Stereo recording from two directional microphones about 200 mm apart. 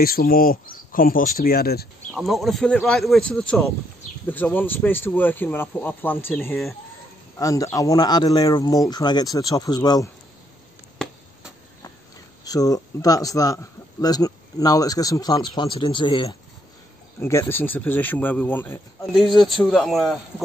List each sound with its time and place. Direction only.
0.0 s speech: 50° left (ahead or behind)
2.1 s speech: centre (ahead or behind); by 10.0 s 20° left (ahead or behind)
12.4 s speech: 20° left (ahead or behind)
17.2 s speech: 10° left (ahead or behind)
19.1 s speech: centre (ahead or behind)